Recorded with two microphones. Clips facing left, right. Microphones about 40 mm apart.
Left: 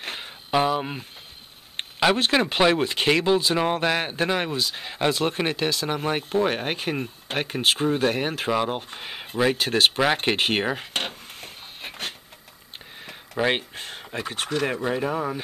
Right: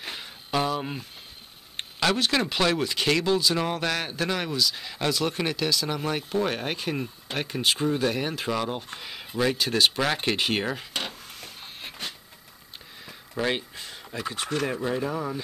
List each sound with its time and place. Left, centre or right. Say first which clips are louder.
0.0 s music: left 3 dB; left
1.8 s a sound: left 4 dB; left
2.5 s speech: left 4 dB; left
8.5 s speech: left 4 dB; left
9.9 s speech: left 4 dB; left
10.9 s a sound: left 3 dB; left
13.5 s speech: left 4 dB; left
15.0 s speech: left 3 dB; left